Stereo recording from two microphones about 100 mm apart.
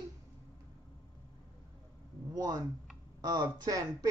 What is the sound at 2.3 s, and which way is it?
A child's voice, 35° right (ahead or behind).